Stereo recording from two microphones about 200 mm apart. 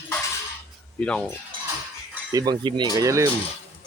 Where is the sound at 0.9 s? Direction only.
5° left (ahead or behind).